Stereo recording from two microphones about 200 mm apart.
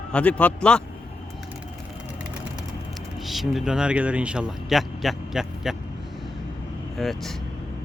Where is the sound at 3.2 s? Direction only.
Centre (ahead or behind).